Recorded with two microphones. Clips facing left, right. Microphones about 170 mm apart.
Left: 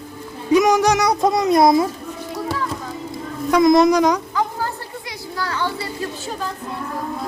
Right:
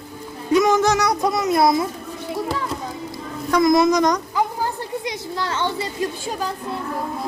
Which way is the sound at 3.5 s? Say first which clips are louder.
Left 3 dB; 15° left (ahead or behind).